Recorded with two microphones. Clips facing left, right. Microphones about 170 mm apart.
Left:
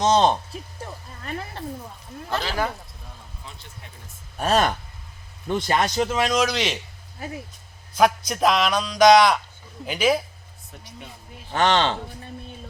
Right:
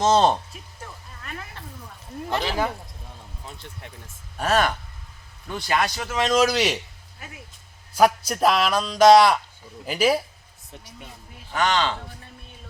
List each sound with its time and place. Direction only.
0.0 s a man's voice: 5° right (ahead or behind)
1.2 s a sound: 35° left (ahead or behind)
2.3 s speech: 20° right (ahead or behind)
4.4 s speech: 35° left (ahead or behind)
5.7 s speech: 20° left (ahead or behind)
6.3 s speech: 5° right (ahead or behind)
7.2 s speech: 35° left (ahead or behind)
7.9 s a man's voice: 5° right (ahead or behind)
11.5 s speech: 30° left (ahead or behind)